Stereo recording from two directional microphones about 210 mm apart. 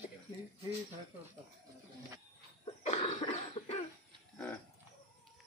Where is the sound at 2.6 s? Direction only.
30° left (ahead or behind).